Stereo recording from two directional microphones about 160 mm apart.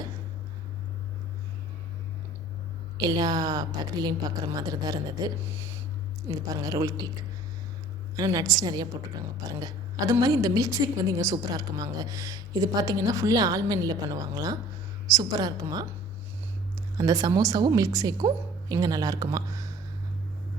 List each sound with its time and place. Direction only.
3.0 s a woman's voice: 25° right (ahead or behind)
8.1 s a woman's voice: 25° right (ahead or behind)
17.0 s a woman's voice: 20° right (ahead or behind)